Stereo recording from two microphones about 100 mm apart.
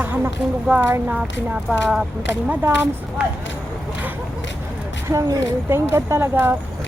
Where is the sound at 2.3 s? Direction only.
20° right (ahead or behind).